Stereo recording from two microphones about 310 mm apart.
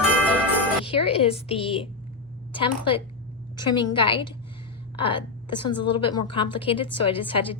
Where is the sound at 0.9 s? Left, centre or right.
Centre.